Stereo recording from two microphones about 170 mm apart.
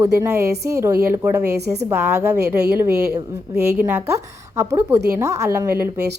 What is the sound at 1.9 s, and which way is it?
A woman's voice, 15° right (ahead or behind).